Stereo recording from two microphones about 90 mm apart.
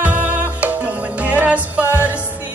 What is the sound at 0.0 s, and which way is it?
Music, 15° right (ahead or behind).